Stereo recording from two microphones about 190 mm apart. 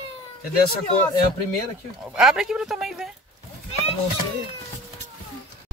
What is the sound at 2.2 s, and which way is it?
Speech, 5° right (ahead or behind).